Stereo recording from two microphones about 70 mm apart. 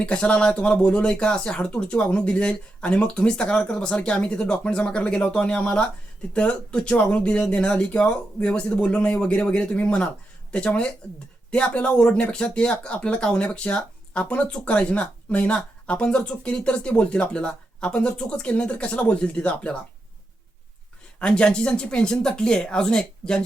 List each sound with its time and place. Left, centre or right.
0.0 s speech: centre
21.2 s speech: centre